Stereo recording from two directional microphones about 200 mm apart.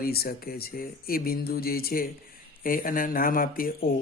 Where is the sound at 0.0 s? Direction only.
50° left (ahead or behind).